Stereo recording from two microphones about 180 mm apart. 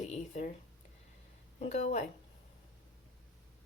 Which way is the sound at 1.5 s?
40° left (ahead or behind).